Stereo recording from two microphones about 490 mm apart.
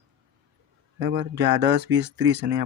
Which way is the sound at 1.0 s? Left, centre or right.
Right.